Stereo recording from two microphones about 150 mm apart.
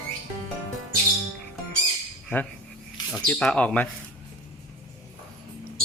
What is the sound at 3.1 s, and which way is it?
Speech, 5° left (ahead or behind).